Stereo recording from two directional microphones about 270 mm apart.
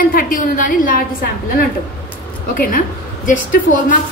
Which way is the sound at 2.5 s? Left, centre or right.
Left.